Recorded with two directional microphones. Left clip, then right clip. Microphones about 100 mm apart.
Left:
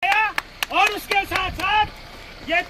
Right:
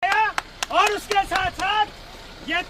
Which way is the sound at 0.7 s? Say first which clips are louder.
Even; 30° right (ahead or behind).